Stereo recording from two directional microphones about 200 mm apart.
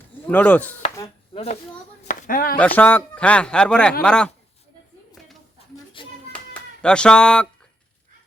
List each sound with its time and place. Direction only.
0.3 s speech: 5° left (ahead or behind)
1.3 s a sound: 30° left (ahead or behind)
2.0 s speech: 40° left (ahead or behind)
2.6 s a man's voice: 5° left (ahead or behind)
6.0 s music: 25° left (ahead or behind)
6.3 s clapping: 5° left (ahead or behind)